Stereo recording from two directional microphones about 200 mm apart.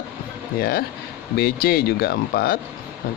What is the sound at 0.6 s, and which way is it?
A man's voice, 50° left (ahead or behind).